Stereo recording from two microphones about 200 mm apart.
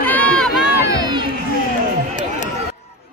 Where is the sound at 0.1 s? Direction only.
10° left (ahead or behind).